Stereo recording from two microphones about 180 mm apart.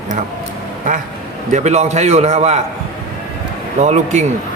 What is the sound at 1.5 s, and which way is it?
Speech, 40° right (ahead or behind).